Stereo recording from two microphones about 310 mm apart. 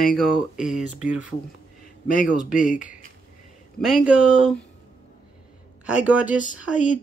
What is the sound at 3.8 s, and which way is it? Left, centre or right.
Speech, centre.